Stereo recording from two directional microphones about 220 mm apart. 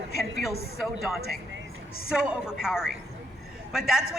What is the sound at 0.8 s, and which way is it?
A woman's voice, centre (ahead or behind).